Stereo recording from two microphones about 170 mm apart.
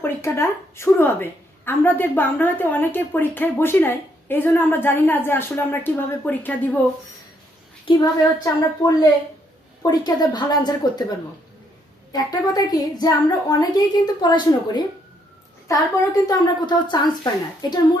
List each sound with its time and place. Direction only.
0.0 s a woman's voice: 15° left (ahead or behind)
7.9 s a woman's voice: 20° left (ahead or behind)
12.1 s a woman's voice: 25° left (ahead or behind)